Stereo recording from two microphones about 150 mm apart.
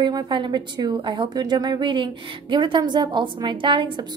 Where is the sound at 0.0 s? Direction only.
30° right (ahead or behind).